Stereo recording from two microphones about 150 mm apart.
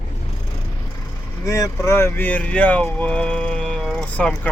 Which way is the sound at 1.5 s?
20° left (ahead or behind).